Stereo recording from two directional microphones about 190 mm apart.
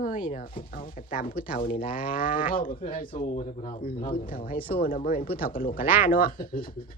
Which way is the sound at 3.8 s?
50° left (ahead or behind).